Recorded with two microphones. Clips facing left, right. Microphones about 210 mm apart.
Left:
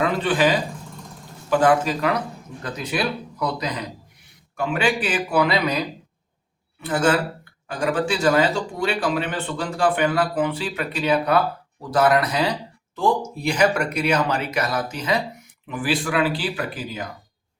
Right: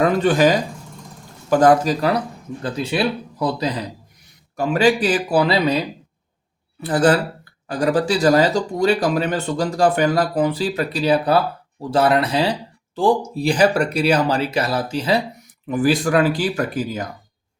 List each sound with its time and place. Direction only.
0.0 s speech: 45° right (ahead or behind)
15.6 s speech: 40° right (ahead or behind)